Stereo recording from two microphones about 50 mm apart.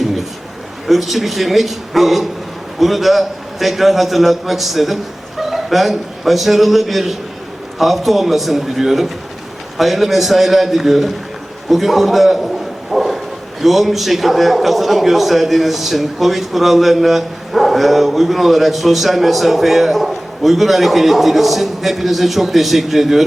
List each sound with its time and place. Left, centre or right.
0.9 s a man's voice: centre